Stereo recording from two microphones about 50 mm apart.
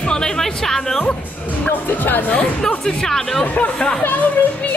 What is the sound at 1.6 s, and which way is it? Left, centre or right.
Speech, left.